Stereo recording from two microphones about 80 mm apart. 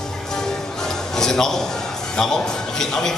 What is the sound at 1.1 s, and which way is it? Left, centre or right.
A man's voice, centre.